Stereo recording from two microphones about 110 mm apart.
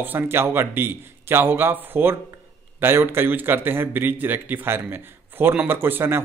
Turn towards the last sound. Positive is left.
turn(degrees=-20)  # may be behind; listen again after turning